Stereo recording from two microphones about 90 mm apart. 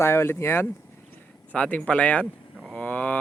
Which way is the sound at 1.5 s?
15° left (ahead or behind).